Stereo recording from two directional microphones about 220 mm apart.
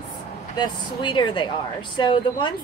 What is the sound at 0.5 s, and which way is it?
Speech, 20° left (ahead or behind).